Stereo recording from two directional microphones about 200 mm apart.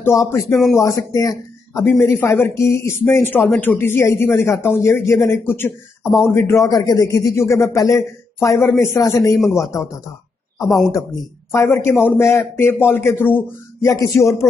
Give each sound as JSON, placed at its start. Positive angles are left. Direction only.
{"t": 0.0, "sound": "a man's voice", "side_deg": 15}
{"t": 10.6, "sound": "speech", "side_deg": 0}
{"t": 11.5, "sound": "a man's voice", "side_deg": 15}